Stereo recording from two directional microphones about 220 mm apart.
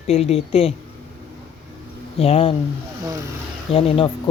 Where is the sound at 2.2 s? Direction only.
25° left (ahead or behind).